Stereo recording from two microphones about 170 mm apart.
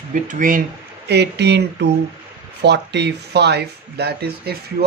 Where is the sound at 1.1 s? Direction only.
80° right.